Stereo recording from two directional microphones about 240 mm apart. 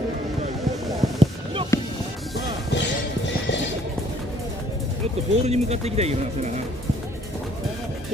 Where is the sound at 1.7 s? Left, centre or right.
Centre.